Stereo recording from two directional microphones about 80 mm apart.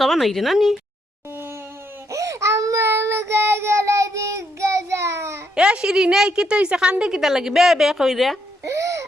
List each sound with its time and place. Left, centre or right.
0.0 s a woman's voice: centre
2.0 s child singing: right
5.5 s a woman's voice: centre
8.6 s a sound: right